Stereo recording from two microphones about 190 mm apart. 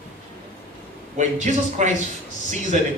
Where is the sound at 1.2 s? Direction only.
40° right (ahead or behind).